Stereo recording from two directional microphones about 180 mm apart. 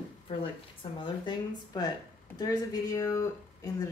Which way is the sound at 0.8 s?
25° left (ahead or behind).